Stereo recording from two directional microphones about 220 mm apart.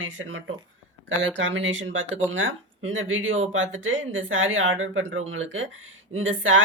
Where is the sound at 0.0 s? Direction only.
60° right (ahead or behind).